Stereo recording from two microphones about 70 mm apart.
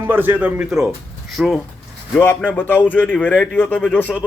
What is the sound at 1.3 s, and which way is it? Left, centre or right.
Speech, centre.